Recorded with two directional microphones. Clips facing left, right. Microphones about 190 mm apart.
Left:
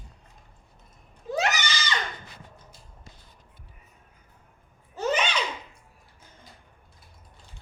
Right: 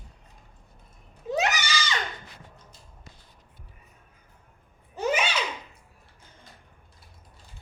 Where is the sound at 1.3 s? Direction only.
15° right (ahead or behind).